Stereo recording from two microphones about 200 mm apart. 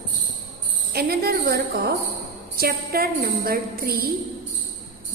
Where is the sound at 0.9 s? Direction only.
50° right (ahead or behind).